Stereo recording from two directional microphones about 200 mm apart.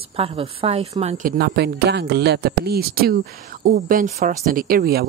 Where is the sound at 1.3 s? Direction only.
55° right (ahead or behind).